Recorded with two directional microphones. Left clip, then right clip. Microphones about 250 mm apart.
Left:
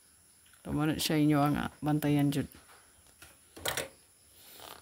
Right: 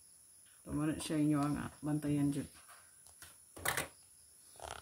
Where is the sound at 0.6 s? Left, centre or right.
Left.